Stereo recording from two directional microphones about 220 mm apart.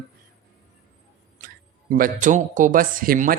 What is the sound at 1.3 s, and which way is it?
Speech, 40° right (ahead or behind).